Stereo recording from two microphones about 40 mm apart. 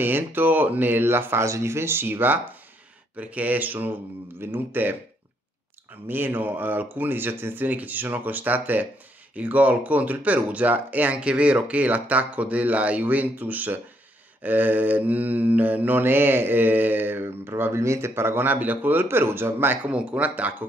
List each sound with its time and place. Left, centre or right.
0.0 s speech: right
1.0 s speech: right
3.2 s speech: right
6.0 s speech: right
7.6 s speech: right
11.1 s speech: right
16.0 s speech: right
18.4 s speech: right
19.0 s speech: right
19.9 s speech: right